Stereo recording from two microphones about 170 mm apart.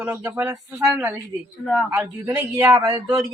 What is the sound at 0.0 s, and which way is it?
Speech, 10° right (ahead or behind).